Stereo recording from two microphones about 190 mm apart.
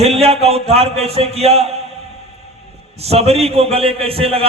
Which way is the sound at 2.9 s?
35° right (ahead or behind).